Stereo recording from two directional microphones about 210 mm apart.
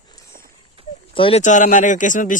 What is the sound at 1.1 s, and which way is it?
Speech, 25° left (ahead or behind).